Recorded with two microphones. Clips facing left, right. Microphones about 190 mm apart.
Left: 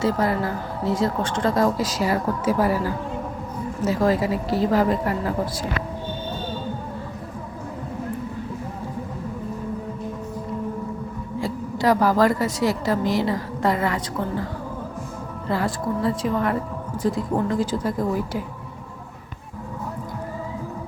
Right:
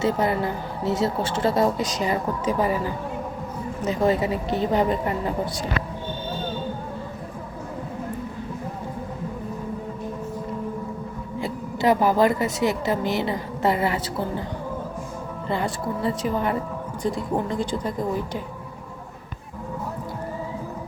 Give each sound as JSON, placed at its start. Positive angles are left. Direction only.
{"t": 0.0, "sound": "a woman's voice", "side_deg": -25}
{"t": 0.9, "sound": "speech", "side_deg": -5}
{"t": 2.6, "sound": "a woman's voice", "side_deg": -15}
{"t": 4.0, "sound": "speech", "side_deg": 0}
{"t": 11.4, "sound": "a woman's voice", "side_deg": -20}
{"t": 12.5, "sound": "a woman's voice", "side_deg": 0}
{"t": 13.8, "sound": "a woman's voice", "side_deg": -30}
{"t": 15.4, "sound": "speech", "side_deg": 0}